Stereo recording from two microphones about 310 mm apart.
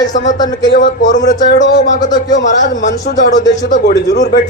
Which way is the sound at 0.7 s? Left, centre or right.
Left.